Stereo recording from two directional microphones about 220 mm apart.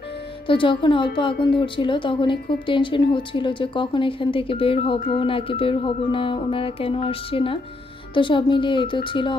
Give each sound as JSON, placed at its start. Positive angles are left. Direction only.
{"t": 0.5, "sound": "a woman's voice", "side_deg": 20}